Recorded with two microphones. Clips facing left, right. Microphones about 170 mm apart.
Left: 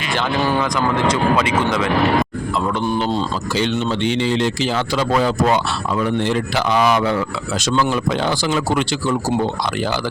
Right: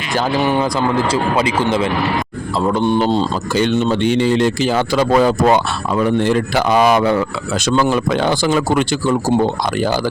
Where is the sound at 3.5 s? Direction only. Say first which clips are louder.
Right 5 dB; 50° right (ahead or behind).